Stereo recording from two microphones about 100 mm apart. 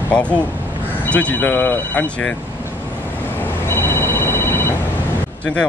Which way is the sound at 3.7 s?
25° left (ahead or behind).